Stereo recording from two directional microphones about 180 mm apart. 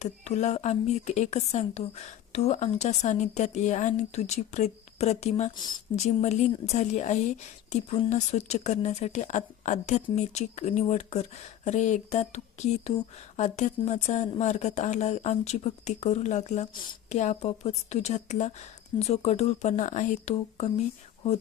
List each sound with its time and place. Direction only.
0.0 s a woman's voice: 40° left (ahead or behind)